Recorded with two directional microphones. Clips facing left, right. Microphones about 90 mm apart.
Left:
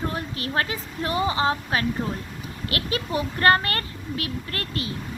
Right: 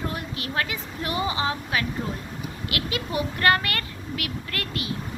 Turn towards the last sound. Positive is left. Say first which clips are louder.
# left 1 dB
turn(degrees=35)  # may be behind; listen again after turning